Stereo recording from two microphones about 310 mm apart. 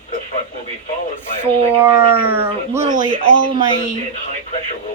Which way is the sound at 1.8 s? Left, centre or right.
Centre.